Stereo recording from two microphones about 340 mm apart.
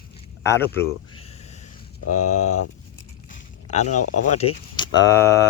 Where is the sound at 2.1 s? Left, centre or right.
Centre.